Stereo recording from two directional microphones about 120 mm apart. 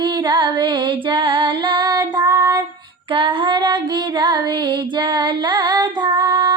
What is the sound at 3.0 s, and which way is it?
Child singing, 45° right (ahead or behind).